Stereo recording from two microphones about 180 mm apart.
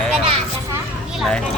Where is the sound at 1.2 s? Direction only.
5° left (ahead or behind).